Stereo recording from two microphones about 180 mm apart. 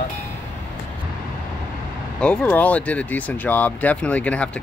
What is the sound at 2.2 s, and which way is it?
Speech, 5° left (ahead or behind).